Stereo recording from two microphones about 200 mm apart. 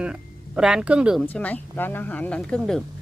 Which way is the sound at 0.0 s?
5° right (ahead or behind).